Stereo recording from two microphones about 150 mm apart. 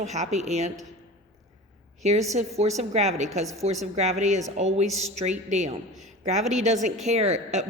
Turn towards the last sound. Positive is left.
turn(degrees=-50)  # may be behind; listen again after turning